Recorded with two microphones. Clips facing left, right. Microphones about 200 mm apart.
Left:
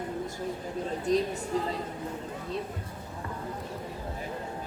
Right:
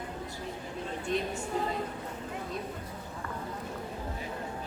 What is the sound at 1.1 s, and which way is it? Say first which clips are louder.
Speech: left 6 dB; 40° left (ahead or behind).